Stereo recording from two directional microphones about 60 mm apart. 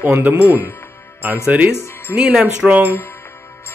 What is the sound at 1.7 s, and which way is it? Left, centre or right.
Speech, left.